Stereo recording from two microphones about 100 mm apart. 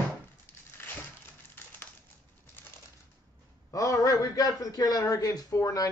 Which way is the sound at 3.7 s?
35° left (ahead or behind).